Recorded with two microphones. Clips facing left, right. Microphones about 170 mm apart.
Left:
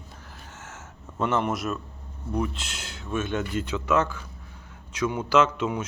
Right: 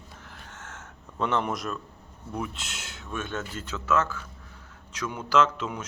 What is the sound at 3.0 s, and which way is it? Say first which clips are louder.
Speech: left 6 dB; 10° left (ahead or behind).